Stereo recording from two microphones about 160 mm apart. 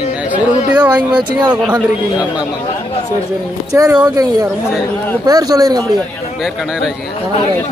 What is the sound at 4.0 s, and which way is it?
Speech, 25° right (ahead or behind).